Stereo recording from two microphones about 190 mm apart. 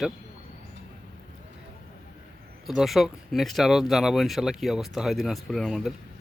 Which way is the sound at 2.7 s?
Centre (ahead or behind).